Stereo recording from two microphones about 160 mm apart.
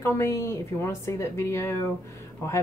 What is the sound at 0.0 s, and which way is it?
Speech, 15° left (ahead or behind).